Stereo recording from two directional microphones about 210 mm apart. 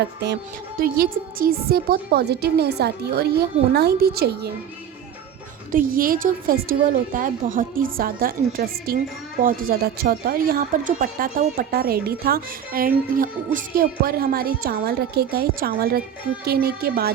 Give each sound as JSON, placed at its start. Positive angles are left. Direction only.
{"t": 0.8, "sound": "a woman's voice", "side_deg": -45}
{"t": 5.7, "sound": "a woman's voice", "side_deg": -40}